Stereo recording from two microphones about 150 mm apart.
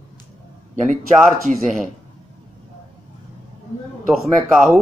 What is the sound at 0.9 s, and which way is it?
Speech, centre (ahead or behind).